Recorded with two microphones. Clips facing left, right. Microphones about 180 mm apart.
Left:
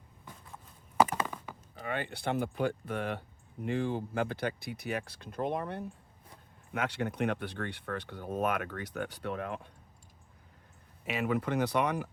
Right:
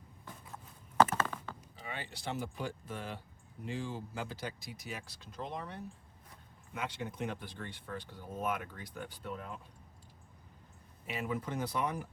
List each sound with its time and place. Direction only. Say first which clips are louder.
0.9 s a sound: left 1 dB; 10° left (ahead or behind)
1.8 s speech: left 8 dB; 60° left (ahead or behind)
6.7 s speech: left 7 dB; 70° left (ahead or behind)
11.0 s speech: left 6 dB; 80° left